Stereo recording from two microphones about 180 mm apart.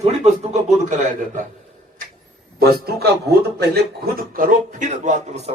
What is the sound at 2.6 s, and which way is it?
A man's voice, 60° right (ahead or behind).